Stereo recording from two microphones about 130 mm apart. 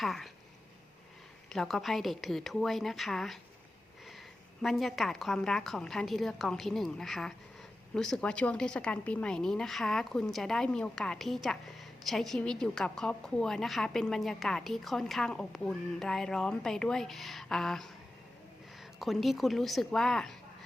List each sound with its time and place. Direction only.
0.0 s a woman's voice: centre (ahead or behind)
1.5 s a woman's voice: centre (ahead or behind)
4.6 s a woman's voice: centre (ahead or behind)